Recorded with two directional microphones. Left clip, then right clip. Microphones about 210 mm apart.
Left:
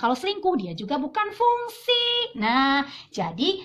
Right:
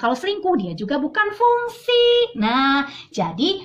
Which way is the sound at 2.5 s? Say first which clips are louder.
Right 1 dB; 10° left (ahead or behind).